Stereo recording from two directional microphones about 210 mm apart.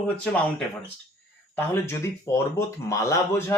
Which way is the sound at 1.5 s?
10° left (ahead or behind).